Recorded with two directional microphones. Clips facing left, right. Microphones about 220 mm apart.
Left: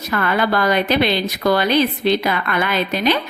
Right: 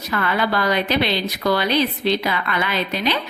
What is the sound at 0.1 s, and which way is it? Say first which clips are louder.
A woman's voice: left 3 dB; 50° left (ahead or behind).